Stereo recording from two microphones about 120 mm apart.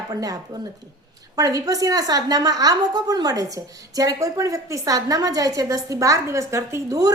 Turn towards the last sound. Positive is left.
turn(degrees=-30)  # may be behind; listen again after turning